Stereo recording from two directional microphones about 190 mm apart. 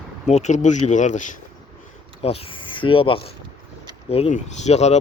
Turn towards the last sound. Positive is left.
turn(degrees=35)  # may be behind; listen again after turning